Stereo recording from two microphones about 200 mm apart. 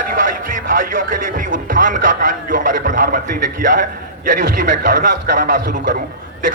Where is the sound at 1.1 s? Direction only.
45° right (ahead or behind).